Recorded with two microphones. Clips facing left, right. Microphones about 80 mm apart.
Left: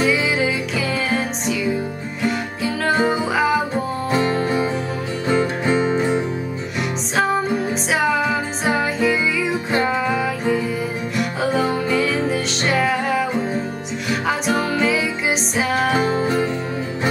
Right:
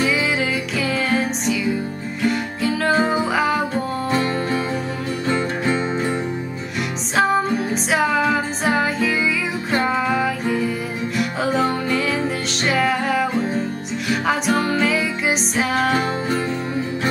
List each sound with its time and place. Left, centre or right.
0.0 s music: centre
3.7 s music: centre
7.2 s music: centre